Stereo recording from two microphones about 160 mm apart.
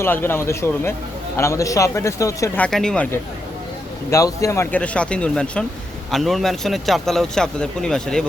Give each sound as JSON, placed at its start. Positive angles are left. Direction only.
{"t": 0.0, "sound": "a man's voice", "side_deg": 15}
{"t": 2.6, "sound": "a man's voice", "side_deg": 5}
{"t": 4.1, "sound": "a man's voice", "side_deg": 20}